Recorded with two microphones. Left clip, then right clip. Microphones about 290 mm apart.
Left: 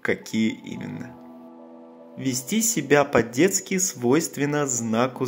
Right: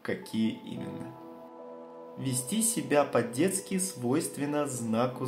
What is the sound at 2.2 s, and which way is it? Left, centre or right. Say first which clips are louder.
Speech: left 8 dB; left.